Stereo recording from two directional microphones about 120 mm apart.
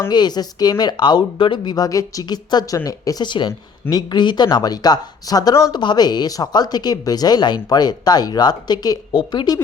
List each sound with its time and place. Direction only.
0.1 s speech: 35° left (ahead or behind)